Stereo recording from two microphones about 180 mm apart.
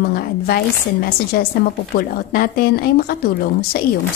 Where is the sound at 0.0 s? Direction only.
55° left (ahead or behind).